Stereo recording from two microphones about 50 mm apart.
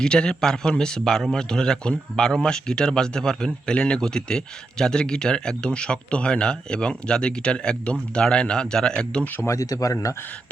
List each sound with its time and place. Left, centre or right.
0.0 s speech: centre
9.4 s speech: left